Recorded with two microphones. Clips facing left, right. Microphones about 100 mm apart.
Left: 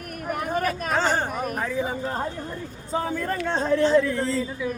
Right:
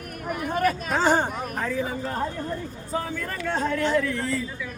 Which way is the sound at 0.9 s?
15° right (ahead or behind).